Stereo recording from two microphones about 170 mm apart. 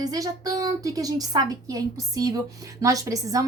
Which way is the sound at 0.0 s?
20° right (ahead or behind).